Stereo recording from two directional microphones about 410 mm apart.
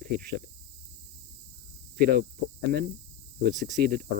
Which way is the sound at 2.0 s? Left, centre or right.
Right.